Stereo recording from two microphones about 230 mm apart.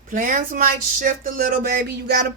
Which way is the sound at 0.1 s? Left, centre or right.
Right.